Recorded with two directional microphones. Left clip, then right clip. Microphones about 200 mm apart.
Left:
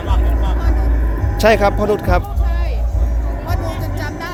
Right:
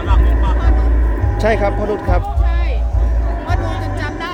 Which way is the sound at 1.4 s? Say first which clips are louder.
Left 4 dB; 20° left (ahead or behind).